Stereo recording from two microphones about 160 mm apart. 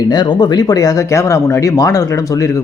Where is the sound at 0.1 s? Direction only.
25° left (ahead or behind).